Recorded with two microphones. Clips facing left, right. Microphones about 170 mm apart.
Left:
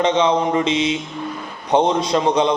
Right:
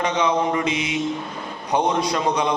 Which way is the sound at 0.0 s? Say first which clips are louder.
Left 4 dB; 25° left (ahead or behind).